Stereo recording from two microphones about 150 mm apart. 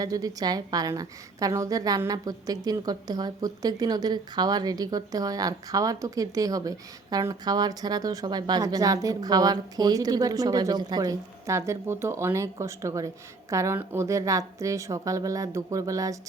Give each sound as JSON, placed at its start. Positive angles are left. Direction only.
{"t": 0.0, "sound": "a woman's voice", "side_deg": -25}